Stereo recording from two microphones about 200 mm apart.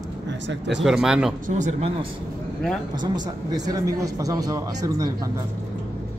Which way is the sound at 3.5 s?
20° right (ahead or behind).